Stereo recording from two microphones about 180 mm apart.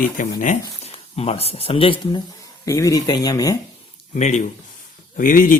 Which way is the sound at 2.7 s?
15° left (ahead or behind).